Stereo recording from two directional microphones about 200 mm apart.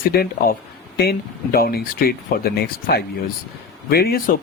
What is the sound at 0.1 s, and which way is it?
Speech, 50° left (ahead or behind).